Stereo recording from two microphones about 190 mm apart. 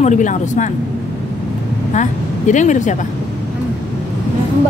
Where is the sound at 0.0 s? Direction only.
40° left (ahead or behind).